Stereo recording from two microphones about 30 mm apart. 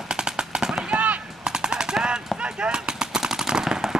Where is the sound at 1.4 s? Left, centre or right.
Right.